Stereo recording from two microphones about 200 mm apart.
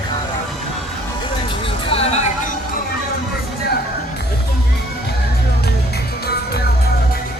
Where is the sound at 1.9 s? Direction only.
30° left (ahead or behind).